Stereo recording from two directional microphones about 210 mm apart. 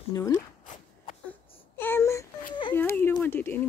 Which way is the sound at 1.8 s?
10° left (ahead or behind).